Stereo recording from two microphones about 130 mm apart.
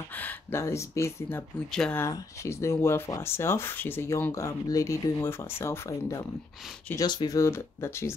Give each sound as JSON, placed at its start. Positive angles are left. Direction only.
{"t": 0.1, "sound": "speech", "side_deg": 15}
{"t": 1.7, "sound": "speech", "side_deg": 5}
{"t": 2.0, "sound": "speech", "side_deg": 25}
{"t": 7.3, "sound": "speech", "side_deg": 20}